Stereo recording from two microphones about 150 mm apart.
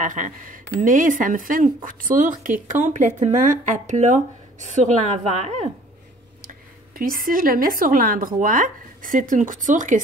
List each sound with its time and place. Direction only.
0.0 s speech: 60° right (ahead or behind)
6.4 s a woman's voice: 70° right (ahead or behind)